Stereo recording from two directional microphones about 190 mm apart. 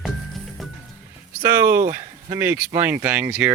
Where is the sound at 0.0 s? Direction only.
Centre (ahead or behind).